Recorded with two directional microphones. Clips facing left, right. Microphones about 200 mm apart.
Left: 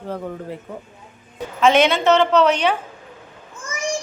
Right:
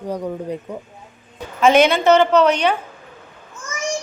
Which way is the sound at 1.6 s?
Centre (ahead or behind).